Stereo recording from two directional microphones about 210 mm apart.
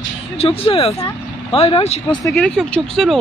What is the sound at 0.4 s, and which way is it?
Speech, 25° left (ahead or behind).